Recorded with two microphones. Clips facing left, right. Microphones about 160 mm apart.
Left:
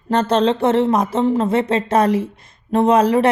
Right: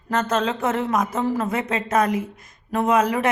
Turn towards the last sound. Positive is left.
turn(degrees=35)  # may be behind; listen again after turning